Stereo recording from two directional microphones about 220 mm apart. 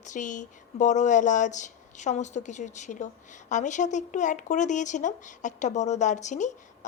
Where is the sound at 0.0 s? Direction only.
35° left (ahead or behind).